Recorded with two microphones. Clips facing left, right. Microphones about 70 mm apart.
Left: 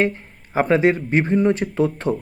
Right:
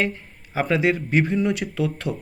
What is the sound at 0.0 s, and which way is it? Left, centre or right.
Speech, left.